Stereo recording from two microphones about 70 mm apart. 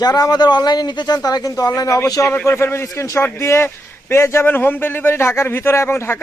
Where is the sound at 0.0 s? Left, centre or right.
Left.